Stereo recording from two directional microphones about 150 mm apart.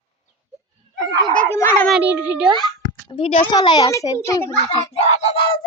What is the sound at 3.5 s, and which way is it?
A child's voice, 25° left (ahead or behind).